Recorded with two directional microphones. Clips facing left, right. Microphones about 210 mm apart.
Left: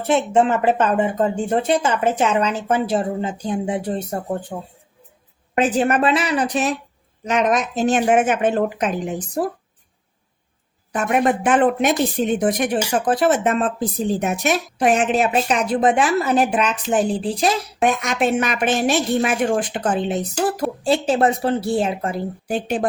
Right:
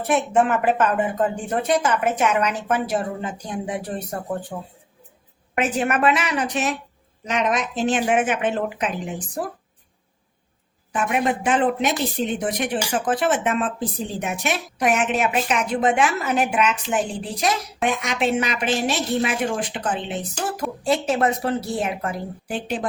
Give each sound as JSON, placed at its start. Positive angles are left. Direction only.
{"t": 0.1, "sound": "speech", "side_deg": 25}
{"t": 5.5, "sound": "a woman's voice", "side_deg": 35}
{"t": 10.9, "sound": "speech", "side_deg": 45}
{"t": 17.8, "sound": "a woman's voice", "side_deg": 50}
{"t": 21.1, "sound": "speech", "side_deg": 30}
{"t": 22.4, "sound": "a woman's voice", "side_deg": 50}